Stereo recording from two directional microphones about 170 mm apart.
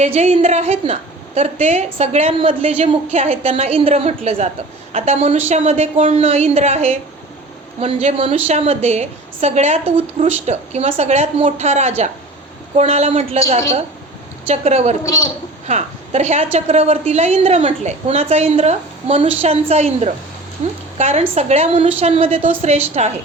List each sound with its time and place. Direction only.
0.0 s a woman's voice: 40° right (ahead or behind)
15.0 s a man's voice: 20° left (ahead or behind)
15.6 s a woman's voice: 40° right (ahead or behind)